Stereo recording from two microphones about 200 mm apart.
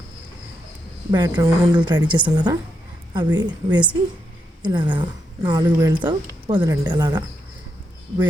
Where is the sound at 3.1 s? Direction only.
20° right (ahead or behind).